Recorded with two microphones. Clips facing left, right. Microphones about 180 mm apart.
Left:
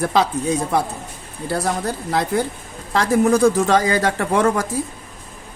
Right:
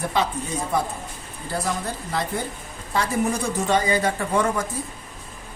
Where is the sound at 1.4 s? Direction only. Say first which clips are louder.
Left 5 dB; 70° left (ahead or behind).